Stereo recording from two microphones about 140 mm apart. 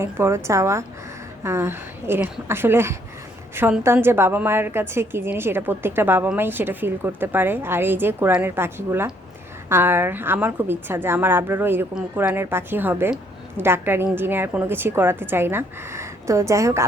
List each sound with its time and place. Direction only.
0.0 s a woman's voice: 20° right (ahead or behind)